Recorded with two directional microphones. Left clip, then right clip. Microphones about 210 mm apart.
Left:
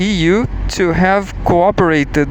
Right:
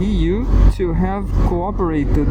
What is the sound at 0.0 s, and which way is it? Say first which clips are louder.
Speech: left 7 dB; 50° left (ahead or behind).